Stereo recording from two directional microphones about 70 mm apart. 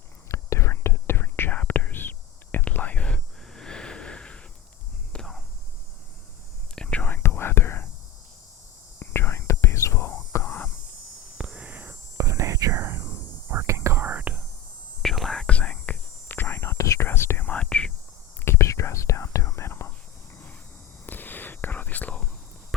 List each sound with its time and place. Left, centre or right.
0.3 s whispering: left; by 5.4 s centre
6.7 s whispering: centre
7.0 s whispering: left
9.0 s whispering: left
10.4 s a sound: left
11.3 s a sound: centre
12.1 s whispering: right
14.1 s whispering: right
15.0 s whispering: centre; by 17.1 s left
17.1 s whispering: left
17.4 s whispering: centre
18.4 s whispering: left
21.1 s whispering: left